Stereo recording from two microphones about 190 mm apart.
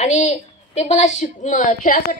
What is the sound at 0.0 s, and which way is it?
A woman's voice, 40° left (ahead or behind).